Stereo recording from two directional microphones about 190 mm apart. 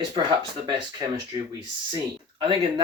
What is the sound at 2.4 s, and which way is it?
Speech, 25° right (ahead or behind).